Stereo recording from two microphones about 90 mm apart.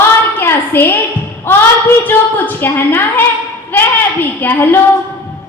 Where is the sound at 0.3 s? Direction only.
25° left (ahead or behind).